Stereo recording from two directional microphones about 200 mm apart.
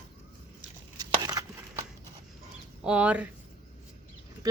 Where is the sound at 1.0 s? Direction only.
20° right (ahead or behind).